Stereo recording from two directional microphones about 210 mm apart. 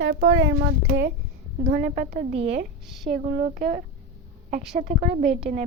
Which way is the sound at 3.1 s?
35° right (ahead or behind).